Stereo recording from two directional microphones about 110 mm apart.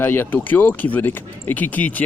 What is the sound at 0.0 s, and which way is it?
Speech, 20° left (ahead or behind).